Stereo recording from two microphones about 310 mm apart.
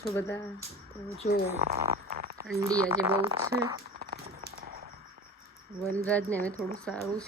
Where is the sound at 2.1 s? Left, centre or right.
Right.